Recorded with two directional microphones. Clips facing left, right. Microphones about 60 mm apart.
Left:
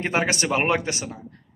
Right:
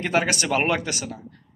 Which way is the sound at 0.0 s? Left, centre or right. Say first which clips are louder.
Right 1 dB; left.